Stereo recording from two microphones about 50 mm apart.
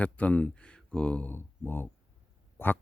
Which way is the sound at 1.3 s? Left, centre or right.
Left.